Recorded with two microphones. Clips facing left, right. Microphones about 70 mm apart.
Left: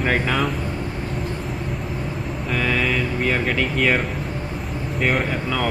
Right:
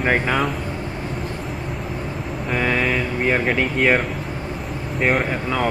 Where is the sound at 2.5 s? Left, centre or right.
Centre.